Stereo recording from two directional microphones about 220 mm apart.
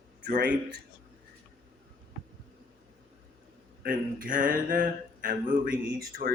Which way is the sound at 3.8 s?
40° right (ahead or behind).